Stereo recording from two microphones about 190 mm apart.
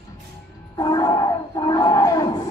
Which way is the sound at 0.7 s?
20° left (ahead or behind).